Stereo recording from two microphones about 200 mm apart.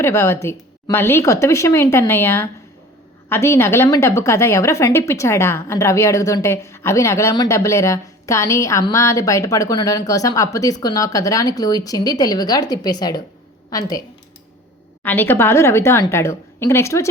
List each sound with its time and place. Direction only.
0.0 s a woman's voice: 15° left (ahead or behind)
15.0 s a woman's voice: 10° left (ahead or behind)